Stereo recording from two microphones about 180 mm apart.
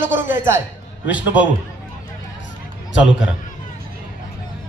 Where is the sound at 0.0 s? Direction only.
90° left.